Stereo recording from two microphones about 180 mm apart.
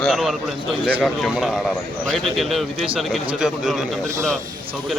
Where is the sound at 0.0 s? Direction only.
Centre (ahead or behind).